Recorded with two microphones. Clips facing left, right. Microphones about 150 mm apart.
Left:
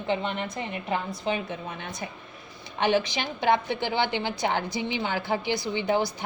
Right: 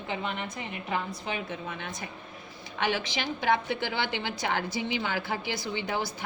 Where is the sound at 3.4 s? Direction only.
25° left (ahead or behind).